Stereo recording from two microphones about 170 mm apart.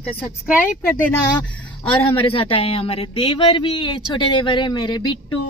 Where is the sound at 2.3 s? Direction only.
35° left (ahead or behind).